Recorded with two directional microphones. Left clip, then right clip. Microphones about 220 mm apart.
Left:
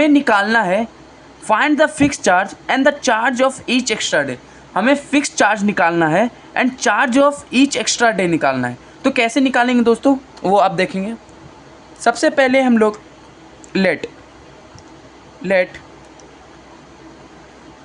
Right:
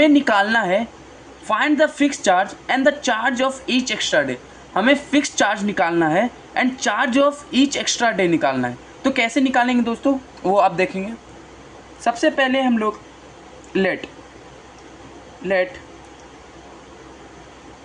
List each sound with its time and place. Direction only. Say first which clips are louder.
0.0 s a woman's voice: left 2 dB; 25° left (ahead or behind)
12.0 s speech: left 4 dB; 40° left (ahead or behind)